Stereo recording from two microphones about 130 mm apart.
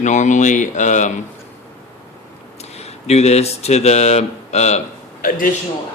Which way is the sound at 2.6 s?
55° left (ahead or behind).